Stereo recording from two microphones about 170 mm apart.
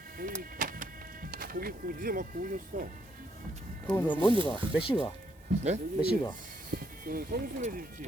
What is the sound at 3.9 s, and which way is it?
Speech, 10° left (ahead or behind).